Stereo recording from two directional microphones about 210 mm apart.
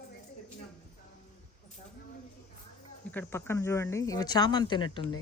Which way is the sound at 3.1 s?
10° left (ahead or behind).